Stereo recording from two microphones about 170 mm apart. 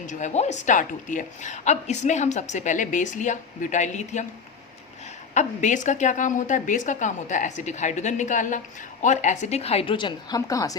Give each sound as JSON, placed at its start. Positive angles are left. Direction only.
{"t": 0.0, "sound": "a woman's voice", "side_deg": 45}
{"t": 5.3, "sound": "a woman's voice", "side_deg": 45}